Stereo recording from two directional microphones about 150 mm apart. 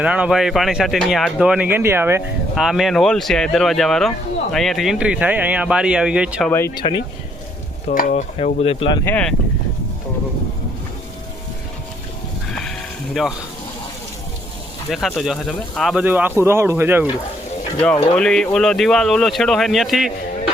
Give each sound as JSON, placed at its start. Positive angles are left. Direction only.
{"t": 0.0, "sound": "speech", "side_deg": -10}
{"t": 2.6, "sound": "speech", "side_deg": 0}
{"t": 6.7, "sound": "speech", "side_deg": 30}
{"t": 7.9, "sound": "speech", "side_deg": 65}
{"t": 8.6, "sound": "speech", "side_deg": 40}
{"t": 9.0, "sound": "speech", "side_deg": 10}
{"t": 12.5, "sound": "sheep", "side_deg": 5}
{"t": 14.8, "sound": "speech", "side_deg": 0}
{"t": 16.0, "sound": "speech", "side_deg": -10}
{"t": 17.7, "sound": "speech", "side_deg": 5}